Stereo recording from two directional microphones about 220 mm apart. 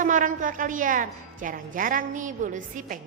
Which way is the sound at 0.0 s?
35° right (ahead or behind).